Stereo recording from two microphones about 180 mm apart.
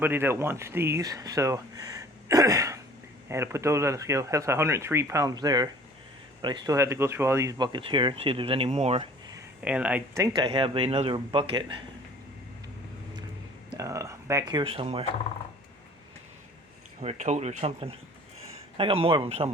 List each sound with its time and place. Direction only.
0.0 s speech: 10° right (ahead or behind); by 9.0 s 35° right (ahead or behind)
9.6 s speech: 5° right (ahead or behind)
10.3 s speech: 25° right (ahead or behind)
13.7 s speech: 15° right (ahead or behind)
17.0 s speech: 40° right (ahead or behind)